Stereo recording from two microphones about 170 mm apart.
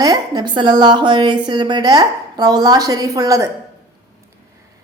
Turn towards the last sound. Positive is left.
turn(degrees=-20)  # may be behind; listen again after turning